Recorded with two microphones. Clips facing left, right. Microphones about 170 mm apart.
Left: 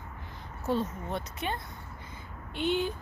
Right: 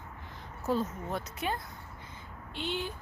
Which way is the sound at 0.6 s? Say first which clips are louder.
Left 1 dB; 5° right (ahead or behind).